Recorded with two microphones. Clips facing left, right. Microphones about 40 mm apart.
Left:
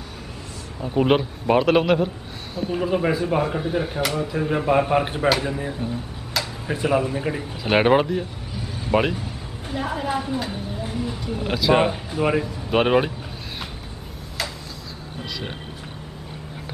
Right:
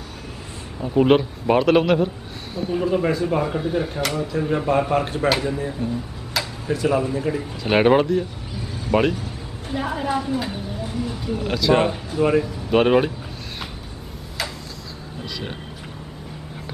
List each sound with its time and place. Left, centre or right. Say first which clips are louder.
0.7 s a man's voice: right 3 dB; centre
6.4 s tick-tock: right 1 dB; centre
6.7 s speech: right 1 dB; left
9.7 s a man's voice: right 1 dB; centre